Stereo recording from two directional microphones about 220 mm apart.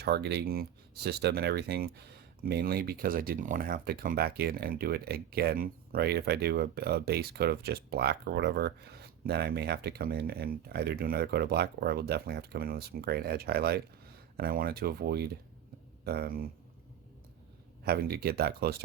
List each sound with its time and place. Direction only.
0.0 s speech: 50° right (ahead or behind)
17.8 s speech: 45° right (ahead or behind)